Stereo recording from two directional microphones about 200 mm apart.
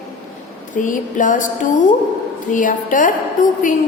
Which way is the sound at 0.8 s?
40° left (ahead or behind).